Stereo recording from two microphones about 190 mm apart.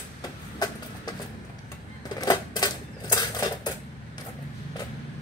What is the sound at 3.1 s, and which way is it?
Dishes, 20° left (ahead or behind).